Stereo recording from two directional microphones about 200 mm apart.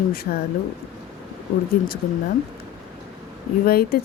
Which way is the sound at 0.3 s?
50° left (ahead or behind).